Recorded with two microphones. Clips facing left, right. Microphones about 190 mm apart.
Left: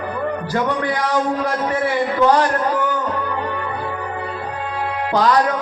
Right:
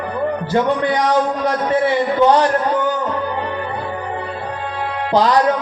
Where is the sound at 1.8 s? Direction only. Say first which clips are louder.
Right 1 dB; 25° right (ahead or behind).